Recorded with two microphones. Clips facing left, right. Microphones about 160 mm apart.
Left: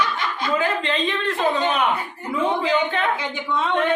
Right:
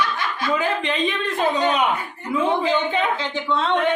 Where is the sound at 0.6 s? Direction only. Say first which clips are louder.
Even; 15° right (ahead or behind).